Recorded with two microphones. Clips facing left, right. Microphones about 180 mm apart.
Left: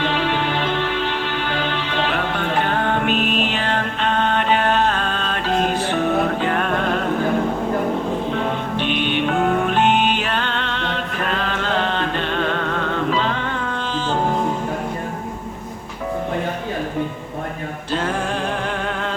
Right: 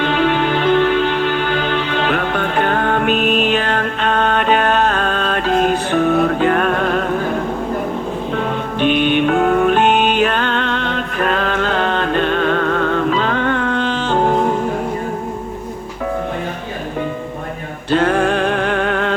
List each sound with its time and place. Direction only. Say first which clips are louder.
0.0 s music: right 5 dB; 50° right (ahead or behind)
8.8 s music: right 8 dB; 50° right (ahead or behind); by 14.3 s 65° right (ahead or behind)
17.9 s music: right 8 dB; 65° right (ahead or behind)